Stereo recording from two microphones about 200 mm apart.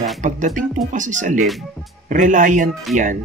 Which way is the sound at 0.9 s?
40° right (ahead or behind).